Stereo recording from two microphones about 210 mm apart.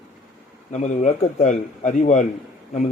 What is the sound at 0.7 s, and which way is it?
A man's voice, 35° left (ahead or behind).